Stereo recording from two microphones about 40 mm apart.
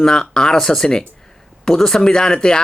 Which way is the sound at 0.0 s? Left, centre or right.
Centre.